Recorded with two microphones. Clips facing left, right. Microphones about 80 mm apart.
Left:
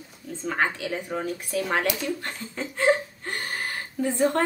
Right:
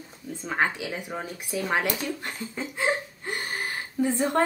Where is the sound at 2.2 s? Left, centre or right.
Centre.